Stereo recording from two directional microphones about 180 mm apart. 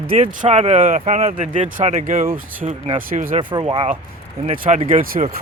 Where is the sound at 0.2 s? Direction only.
40° right (ahead or behind).